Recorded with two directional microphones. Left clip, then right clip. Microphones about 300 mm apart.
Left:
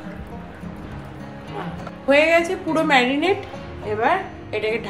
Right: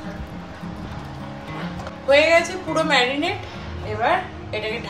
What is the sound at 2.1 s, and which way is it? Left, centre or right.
A woman's voice, left.